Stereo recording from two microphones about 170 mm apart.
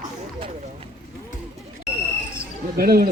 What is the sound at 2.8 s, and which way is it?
Speech, 60° right (ahead or behind).